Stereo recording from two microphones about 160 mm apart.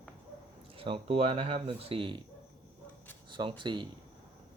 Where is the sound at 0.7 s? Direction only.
35° right (ahead or behind).